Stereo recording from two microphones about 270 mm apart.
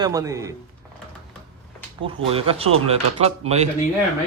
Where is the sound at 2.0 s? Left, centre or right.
Centre.